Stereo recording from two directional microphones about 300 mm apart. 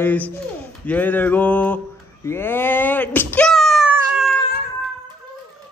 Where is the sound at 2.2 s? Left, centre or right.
Centre.